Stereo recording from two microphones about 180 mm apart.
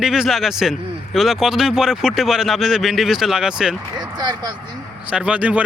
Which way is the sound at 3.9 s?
25° right (ahead or behind).